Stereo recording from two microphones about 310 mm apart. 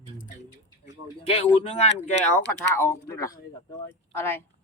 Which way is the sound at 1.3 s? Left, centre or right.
Centre.